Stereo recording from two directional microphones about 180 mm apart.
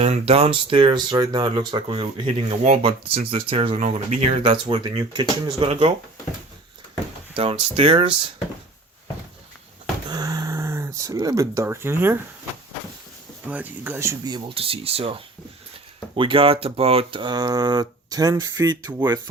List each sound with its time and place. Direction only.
0.0 s speech: 35° right (ahead or behind)
7.3 s speech: 30° right (ahead or behind)
10.1 s a sound: 20° right (ahead or behind)
13.5 s speech: 10° right (ahead or behind)